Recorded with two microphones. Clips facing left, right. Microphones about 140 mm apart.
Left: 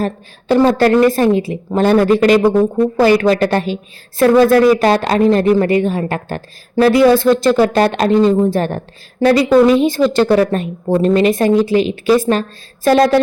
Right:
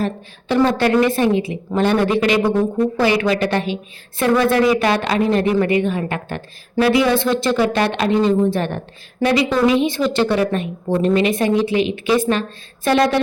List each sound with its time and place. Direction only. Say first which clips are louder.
0.0 s speech: left 3 dB; 40° left (ahead or behind)